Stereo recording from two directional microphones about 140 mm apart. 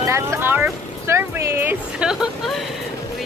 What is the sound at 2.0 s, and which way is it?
Speech, 5° right (ahead or behind).